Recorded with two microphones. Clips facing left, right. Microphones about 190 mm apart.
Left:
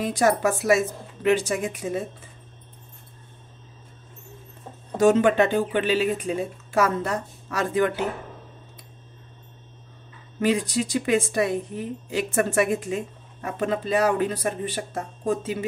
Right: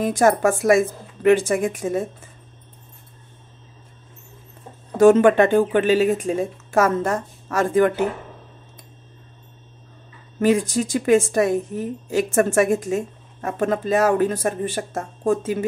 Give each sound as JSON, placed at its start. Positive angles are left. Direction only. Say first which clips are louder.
{"t": 0.0, "sound": "a woman's voice", "louder": "right 4 dB", "side_deg": -50}
{"t": 4.9, "sound": "a woman's voice", "louder": "right 5 dB", "side_deg": -55}
{"t": 10.4, "sound": "a woman's voice", "louder": "right 4 dB", "side_deg": -45}